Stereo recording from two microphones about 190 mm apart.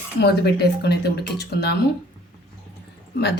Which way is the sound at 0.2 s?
55° left (ahead or behind).